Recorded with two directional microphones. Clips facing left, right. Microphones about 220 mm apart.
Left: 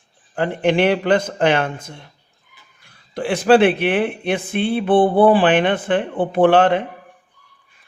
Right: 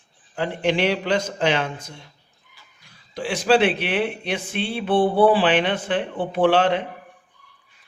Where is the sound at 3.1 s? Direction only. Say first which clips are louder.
Left 5 dB; 55° left (ahead or behind).